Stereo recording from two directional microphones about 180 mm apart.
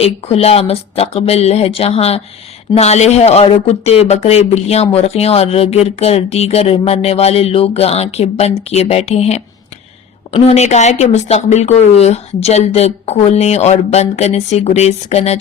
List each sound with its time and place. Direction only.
0.0 s speech: 35° left (ahead or behind)